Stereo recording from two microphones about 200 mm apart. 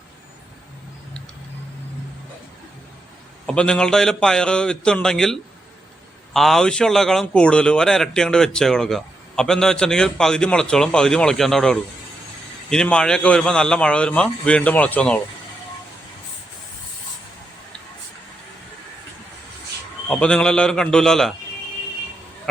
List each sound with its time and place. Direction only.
3.4 s speech: 5° left (ahead or behind)
20.1 s speech: 5° left (ahead or behind)